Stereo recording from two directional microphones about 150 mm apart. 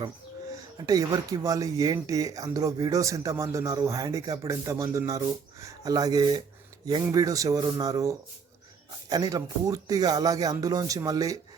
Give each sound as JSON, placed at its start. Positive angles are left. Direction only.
{"t": 0.9, "sound": "speech", "side_deg": -25}